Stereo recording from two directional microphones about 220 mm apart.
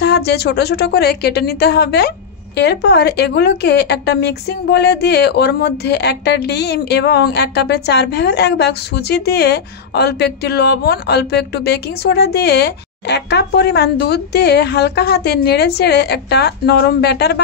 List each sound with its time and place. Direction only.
0.0 s speech: 50° left (ahead or behind)